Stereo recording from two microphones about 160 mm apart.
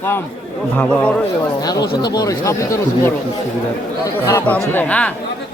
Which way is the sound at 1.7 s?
25° left (ahead or behind).